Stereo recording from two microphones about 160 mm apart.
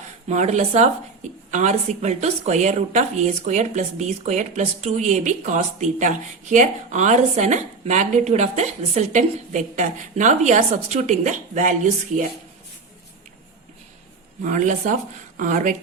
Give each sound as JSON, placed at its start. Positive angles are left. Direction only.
{"t": 0.3, "sound": "a woman's voice", "side_deg": -45}
{"t": 14.4, "sound": "a woman's voice", "side_deg": -50}